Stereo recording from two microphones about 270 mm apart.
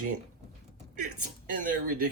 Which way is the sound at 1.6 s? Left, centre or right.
Right.